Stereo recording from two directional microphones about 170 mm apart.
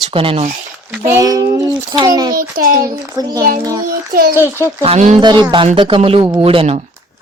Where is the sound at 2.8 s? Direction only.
20° right (ahead or behind).